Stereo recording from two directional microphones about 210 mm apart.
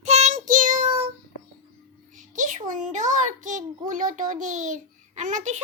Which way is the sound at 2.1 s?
35° right (ahead or behind).